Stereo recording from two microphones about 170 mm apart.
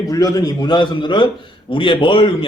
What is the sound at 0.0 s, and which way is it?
Speech, 20° left (ahead or behind).